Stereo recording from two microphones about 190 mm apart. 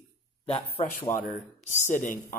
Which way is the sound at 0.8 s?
35° left (ahead or behind).